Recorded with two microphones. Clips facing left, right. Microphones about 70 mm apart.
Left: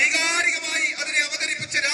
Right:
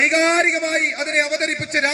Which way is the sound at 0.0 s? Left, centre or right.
Right.